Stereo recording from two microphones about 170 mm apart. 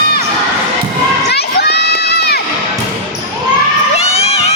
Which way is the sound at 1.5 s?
70° left (ahead or behind).